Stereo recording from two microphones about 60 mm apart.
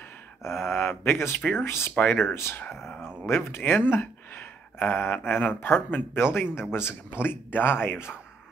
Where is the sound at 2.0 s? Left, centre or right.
Left.